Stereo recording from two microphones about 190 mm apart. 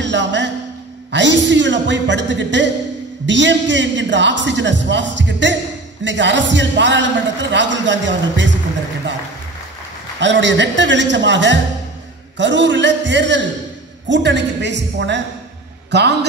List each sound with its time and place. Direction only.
0.0 s music: 70° right (ahead or behind)
1.1 s a man's voice: 70° right (ahead or behind)
10.2 s a man's voice: 70° right (ahead or behind)